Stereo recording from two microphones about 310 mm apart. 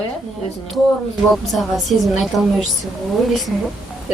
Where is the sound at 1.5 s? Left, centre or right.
Centre.